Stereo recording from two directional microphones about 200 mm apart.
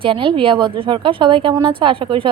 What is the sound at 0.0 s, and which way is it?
Speech, 25° right (ahead or behind).